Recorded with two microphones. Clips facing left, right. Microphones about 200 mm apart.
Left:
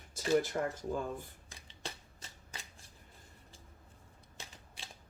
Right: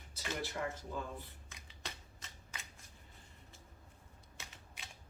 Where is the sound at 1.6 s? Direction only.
30° left (ahead or behind).